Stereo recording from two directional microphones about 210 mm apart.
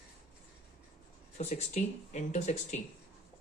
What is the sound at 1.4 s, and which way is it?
Speech, 30° left (ahead or behind).